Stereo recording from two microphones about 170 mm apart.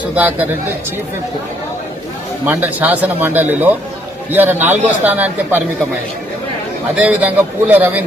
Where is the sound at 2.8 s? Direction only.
10° right (ahead or behind).